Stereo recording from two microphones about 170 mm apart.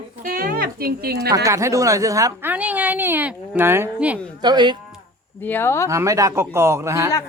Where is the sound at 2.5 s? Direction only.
10° right (ahead or behind).